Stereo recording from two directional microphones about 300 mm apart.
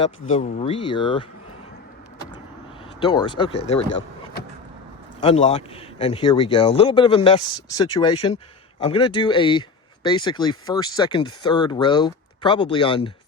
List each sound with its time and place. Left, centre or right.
0.3 s speech: left
3.0 s speech: centre
5.2 s speech: centre